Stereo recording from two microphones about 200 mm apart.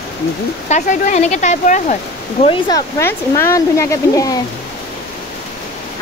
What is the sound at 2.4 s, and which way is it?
Speech, 25° left (ahead or behind).